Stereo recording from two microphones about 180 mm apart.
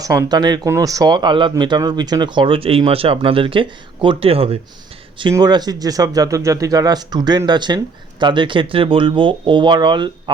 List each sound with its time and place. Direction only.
0.0 s speech: 20° right (ahead or behind)
5.3 s speech: 20° right (ahead or behind)